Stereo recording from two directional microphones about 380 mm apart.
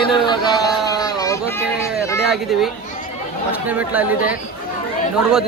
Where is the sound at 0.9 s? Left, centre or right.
Centre.